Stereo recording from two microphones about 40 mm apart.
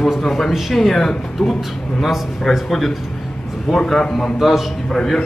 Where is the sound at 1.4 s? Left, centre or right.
Centre.